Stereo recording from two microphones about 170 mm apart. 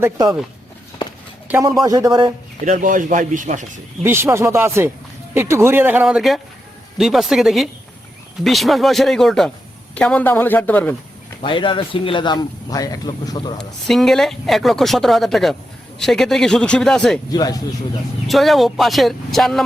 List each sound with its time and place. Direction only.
0.0 s speech: 25° right (ahead or behind)
1.8 s speech: 20° right (ahead or behind)
2.6 s speech: 50° right (ahead or behind)
4.0 s a man's voice: 15° right (ahead or behind); by 10.9 s 10° left (ahead or behind)
11.4 s speech: 30° left (ahead or behind)
13.6 s speech: centre (ahead or behind)
17.3 s speech: 20° left (ahead or behind)
18.3 s speech: centre (ahead or behind)